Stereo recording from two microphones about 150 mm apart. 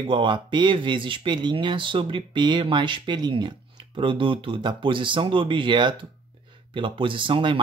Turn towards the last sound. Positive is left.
turn(degrees=-35)  # may be behind; listen again after turning